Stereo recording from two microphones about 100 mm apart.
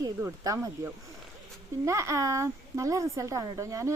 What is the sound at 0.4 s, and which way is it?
Speech, 35° right (ahead or behind).